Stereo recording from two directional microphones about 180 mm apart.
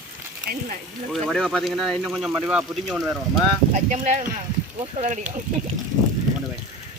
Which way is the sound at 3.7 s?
45° right (ahead or behind).